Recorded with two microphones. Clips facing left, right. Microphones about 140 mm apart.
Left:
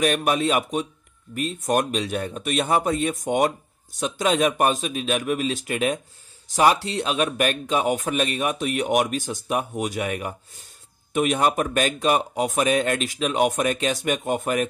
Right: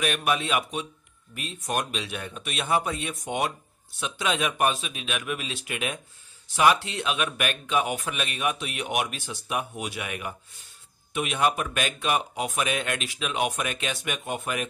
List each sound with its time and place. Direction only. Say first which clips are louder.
0.0 s speech: left 5 dB; 40° left (ahead or behind)